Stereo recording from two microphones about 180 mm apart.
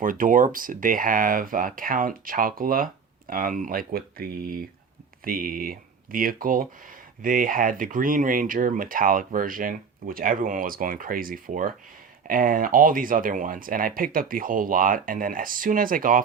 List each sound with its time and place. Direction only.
0.0 s speech: 50° right (ahead or behind)